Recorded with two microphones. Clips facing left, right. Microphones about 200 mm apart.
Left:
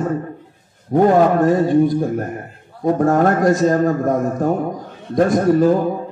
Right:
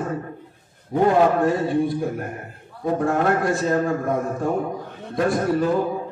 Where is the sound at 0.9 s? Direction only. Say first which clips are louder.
Left 4 dB; 45° left (ahead or behind).